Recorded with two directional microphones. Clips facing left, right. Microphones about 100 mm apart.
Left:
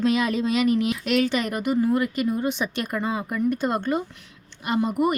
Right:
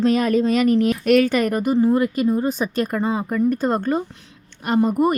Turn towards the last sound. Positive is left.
turn(degrees=-40)  # may be behind; listen again after turning